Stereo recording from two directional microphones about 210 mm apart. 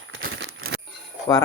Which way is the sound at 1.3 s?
15° left (ahead or behind).